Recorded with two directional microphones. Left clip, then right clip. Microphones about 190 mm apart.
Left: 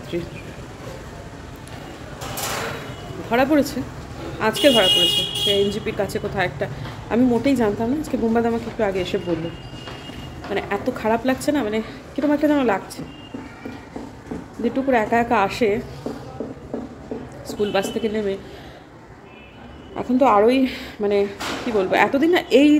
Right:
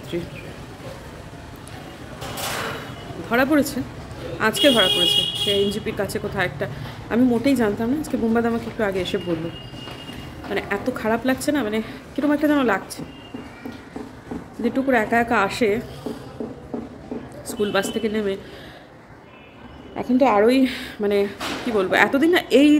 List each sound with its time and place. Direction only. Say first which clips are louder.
0.1 s speech: left 1 dB; centre (ahead or behind)
3.3 s speech: left 1 dB; centre (ahead or behind)
10.5 s speech: left 1 dB; centre (ahead or behind)
14.6 s speech: left 1 dB; 5° right (ahead or behind)
17.5 s speech: left 1 dB; 5° right (ahead or behind)
20.0 s speech: left 1 dB; 5° right (ahead or behind)